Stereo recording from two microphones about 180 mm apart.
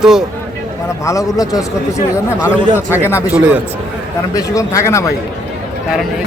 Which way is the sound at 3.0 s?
15° left (ahead or behind).